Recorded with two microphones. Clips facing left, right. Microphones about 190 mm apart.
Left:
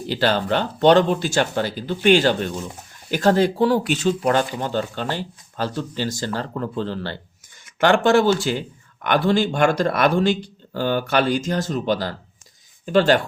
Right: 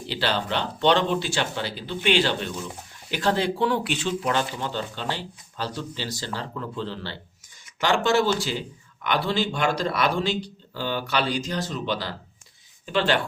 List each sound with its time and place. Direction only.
0.1 s speech: 45° left (ahead or behind)